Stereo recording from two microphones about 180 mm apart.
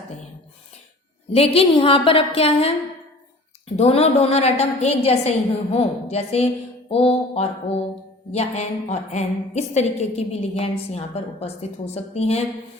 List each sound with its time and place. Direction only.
1.3 s a woman's voice: 35° left (ahead or behind)
3.8 s a woman's voice: 35° left (ahead or behind)